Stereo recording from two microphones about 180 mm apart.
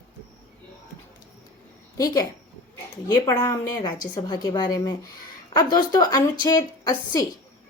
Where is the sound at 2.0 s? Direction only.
20° left (ahead or behind).